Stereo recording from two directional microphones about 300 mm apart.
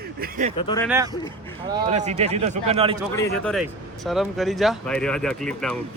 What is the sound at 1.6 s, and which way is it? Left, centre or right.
Speech, right.